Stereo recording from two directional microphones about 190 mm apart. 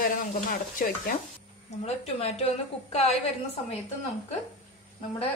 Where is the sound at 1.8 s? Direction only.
35° left (ahead or behind).